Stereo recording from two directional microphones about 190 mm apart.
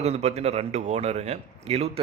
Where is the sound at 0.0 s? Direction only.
35° right (ahead or behind).